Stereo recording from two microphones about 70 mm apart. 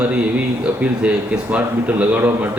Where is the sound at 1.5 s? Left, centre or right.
Right.